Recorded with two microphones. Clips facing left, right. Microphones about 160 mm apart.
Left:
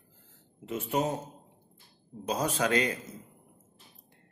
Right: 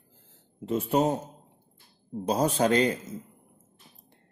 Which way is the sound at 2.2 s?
30° right (ahead or behind).